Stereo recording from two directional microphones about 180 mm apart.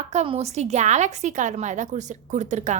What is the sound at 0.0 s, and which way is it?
A woman's voice, 35° right (ahead or behind).